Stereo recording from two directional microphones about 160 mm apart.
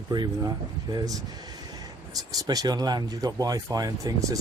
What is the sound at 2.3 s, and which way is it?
Speech, 25° right (ahead or behind).